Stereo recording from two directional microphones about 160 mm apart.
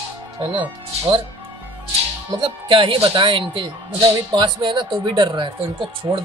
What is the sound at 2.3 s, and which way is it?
Speech, 30° right (ahead or behind).